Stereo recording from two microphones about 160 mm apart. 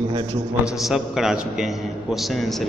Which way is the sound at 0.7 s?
Centre (ahead or behind).